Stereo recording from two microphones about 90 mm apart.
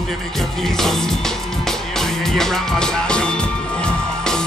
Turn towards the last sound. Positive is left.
turn(degrees=10)  # may be behind; listen again after turning